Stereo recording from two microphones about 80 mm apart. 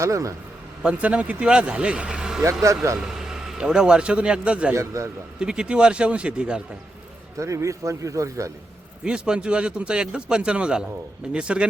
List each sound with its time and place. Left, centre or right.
0.0 s speech: right
0.8 s speech: centre
2.4 s speech: right
3.0 s speech: centre
4.7 s speech: right
5.4 s speech: centre
7.3 s speech: right
9.0 s speech: centre